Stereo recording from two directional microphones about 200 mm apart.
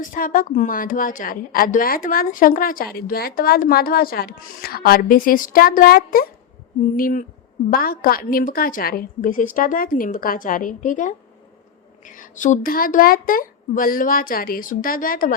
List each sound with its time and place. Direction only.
0.0 s a woman's voice: 40° left (ahead or behind)